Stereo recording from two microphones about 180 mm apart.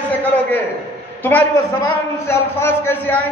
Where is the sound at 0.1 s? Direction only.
10° left (ahead or behind).